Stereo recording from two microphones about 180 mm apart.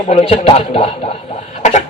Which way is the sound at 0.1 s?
35° left (ahead or behind).